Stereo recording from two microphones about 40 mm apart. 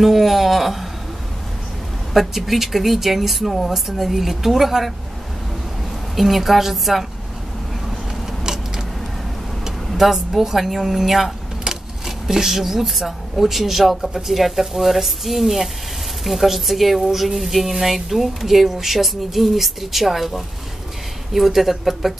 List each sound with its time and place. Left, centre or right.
0.0 s a sound: centre
2.1 s speech: centre
6.1 s speech: centre
9.7 s speech: centre